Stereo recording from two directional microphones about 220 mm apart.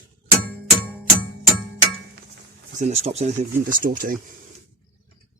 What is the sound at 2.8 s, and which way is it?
Speech, 30° right (ahead or behind).